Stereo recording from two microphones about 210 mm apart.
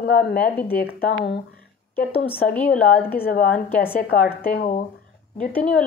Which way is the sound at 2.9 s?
45° left (ahead or behind).